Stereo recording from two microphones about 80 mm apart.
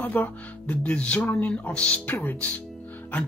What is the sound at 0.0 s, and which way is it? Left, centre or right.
Speech, left.